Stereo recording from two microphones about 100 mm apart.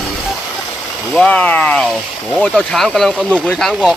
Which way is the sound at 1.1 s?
10° left (ahead or behind).